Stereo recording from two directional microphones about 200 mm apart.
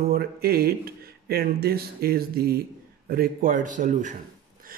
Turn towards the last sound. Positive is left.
turn(degrees=-40)  # may be behind; listen again after turning